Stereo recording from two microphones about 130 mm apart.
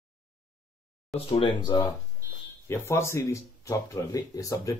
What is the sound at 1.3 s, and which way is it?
Speech, 40° left (ahead or behind).